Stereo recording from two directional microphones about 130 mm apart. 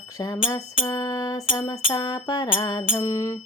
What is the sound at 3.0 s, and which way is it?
Music, 25° left (ahead or behind).